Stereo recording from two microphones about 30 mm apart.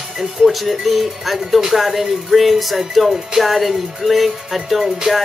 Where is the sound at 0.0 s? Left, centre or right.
Centre.